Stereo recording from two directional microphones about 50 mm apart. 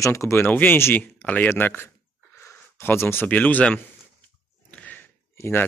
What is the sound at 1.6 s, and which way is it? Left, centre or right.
Speech, left.